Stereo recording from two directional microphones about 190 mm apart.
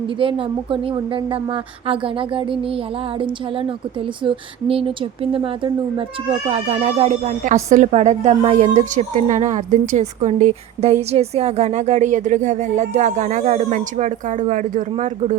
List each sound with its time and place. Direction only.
0.2 s a woman's voice: 25° right (ahead or behind)